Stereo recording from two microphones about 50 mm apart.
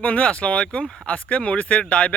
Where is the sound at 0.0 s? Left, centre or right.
Left.